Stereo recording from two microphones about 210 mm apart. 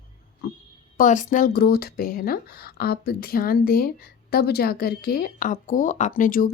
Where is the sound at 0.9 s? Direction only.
35° left (ahead or behind).